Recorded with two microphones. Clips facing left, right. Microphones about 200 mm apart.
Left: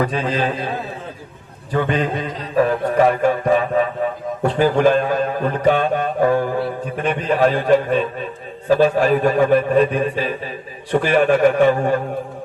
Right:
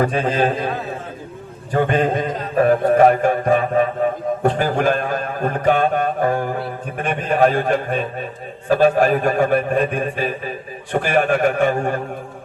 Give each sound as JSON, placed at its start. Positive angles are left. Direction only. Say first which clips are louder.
{"t": 0.0, "sound": "mantra", "louder": "right 2 dB", "side_deg": -50}
{"t": 1.7, "sound": "mantra", "louder": "right 2 dB", "side_deg": -45}